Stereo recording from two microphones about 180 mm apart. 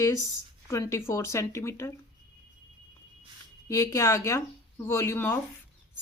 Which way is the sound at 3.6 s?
15° left (ahead or behind).